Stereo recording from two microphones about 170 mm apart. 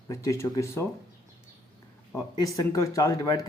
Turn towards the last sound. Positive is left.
turn(degrees=20)  # may be behind; listen again after turning